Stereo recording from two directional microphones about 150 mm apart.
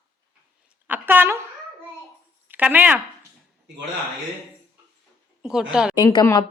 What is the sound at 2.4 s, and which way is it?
Speech, 10° right (ahead or behind).